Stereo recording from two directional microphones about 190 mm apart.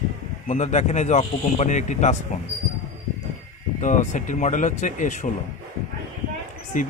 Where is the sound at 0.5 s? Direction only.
40° left (ahead or behind).